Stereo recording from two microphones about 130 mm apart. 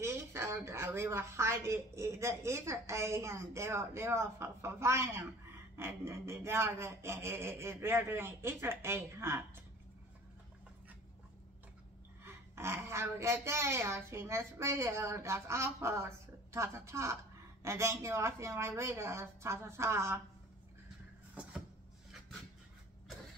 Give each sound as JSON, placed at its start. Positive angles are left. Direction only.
{"t": 0.0, "sound": "a woman's voice", "side_deg": -20}
{"t": 12.3, "sound": "a woman's voice", "side_deg": -20}